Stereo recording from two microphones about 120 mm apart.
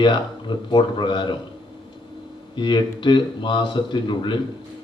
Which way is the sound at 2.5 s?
40° left (ahead or behind).